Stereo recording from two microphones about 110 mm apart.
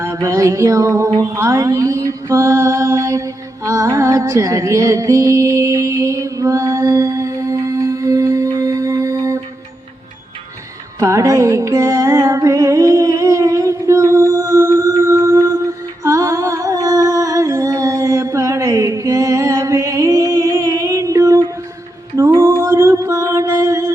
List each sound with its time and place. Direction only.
0.0 s music: 30° right (ahead or behind)
1.4 s mantra: 30° right (ahead or behind)
11.0 s music: 30° right (ahead or behind)